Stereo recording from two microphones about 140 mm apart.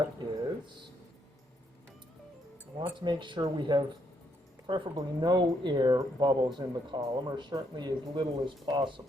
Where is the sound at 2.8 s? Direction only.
35° right (ahead or behind).